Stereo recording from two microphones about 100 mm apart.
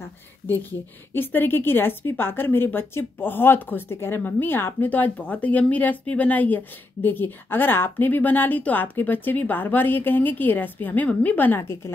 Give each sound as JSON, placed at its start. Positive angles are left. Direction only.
{"t": 0.5, "sound": "a woman's voice", "side_deg": 20}